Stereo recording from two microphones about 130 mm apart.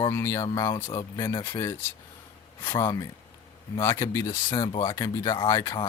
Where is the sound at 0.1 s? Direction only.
20° left (ahead or behind).